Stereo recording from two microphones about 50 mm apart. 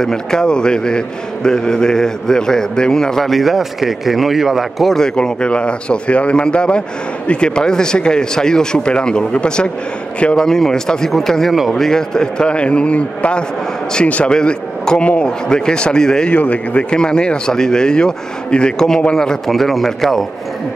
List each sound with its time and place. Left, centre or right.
0.0 s a man's voice: centre
3.3 s a man's voice: centre
4.9 s a man's voice: centre
14.3 s a man's voice: centre
15.4 s a man's voice: centre
16.3 s a man's voice: left; by 20.2 s centre